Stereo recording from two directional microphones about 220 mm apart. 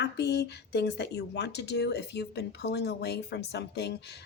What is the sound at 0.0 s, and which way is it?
Speech, 50° left (ahead or behind).